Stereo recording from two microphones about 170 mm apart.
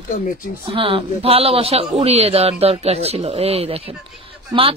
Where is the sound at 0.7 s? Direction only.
35° right (ahead or behind).